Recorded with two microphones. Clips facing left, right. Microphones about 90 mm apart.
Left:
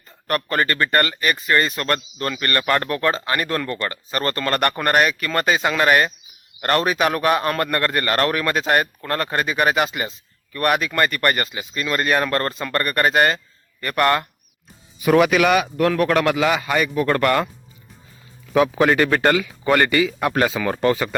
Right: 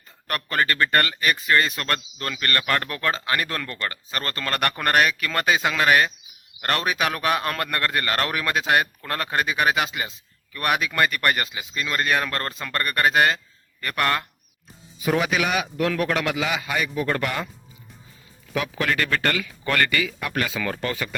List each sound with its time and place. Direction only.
0.3 s a man's voice: centre (ahead or behind)
14.9 s a man's voice: 75° left (ahead or behind)
15.9 s a man's voice: 50° left (ahead or behind)
18.5 s speech: 30° left (ahead or behind)
20.1 s speech: 35° left (ahead or behind)